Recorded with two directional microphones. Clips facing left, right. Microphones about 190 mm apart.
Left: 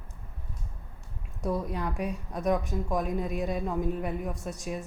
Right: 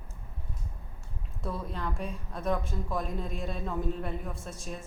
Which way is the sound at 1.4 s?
15° left (ahead or behind).